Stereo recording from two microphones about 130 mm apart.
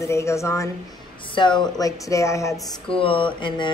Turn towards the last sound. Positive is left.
turn(degrees=40)  # may be behind; listen again after turning